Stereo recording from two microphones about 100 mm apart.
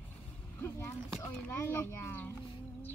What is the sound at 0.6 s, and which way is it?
Speech, 20° left (ahead or behind).